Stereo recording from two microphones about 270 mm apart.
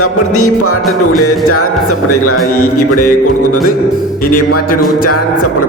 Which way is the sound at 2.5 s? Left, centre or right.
Left.